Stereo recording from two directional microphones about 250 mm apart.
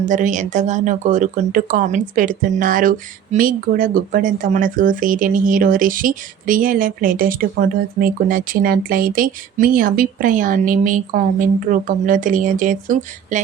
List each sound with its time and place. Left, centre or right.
0.0 s speech: right